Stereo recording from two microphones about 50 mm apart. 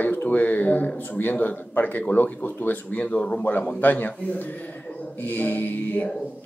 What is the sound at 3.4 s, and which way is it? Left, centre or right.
Speech, left.